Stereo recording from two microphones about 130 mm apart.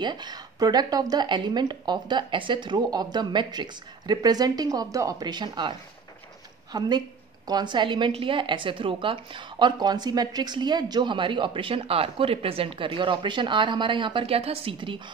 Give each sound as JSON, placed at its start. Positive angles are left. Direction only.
{"t": 0.0, "sound": "a woman's voice", "side_deg": -35}